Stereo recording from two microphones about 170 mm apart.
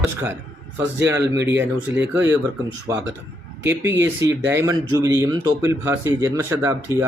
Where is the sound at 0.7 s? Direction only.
15° right (ahead or behind).